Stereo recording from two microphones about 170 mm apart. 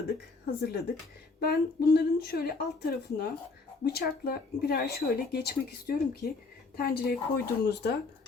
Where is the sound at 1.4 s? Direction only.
65° left (ahead or behind).